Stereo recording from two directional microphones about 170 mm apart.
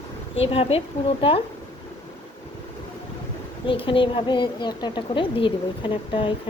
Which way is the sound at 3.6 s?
30° left (ahead or behind).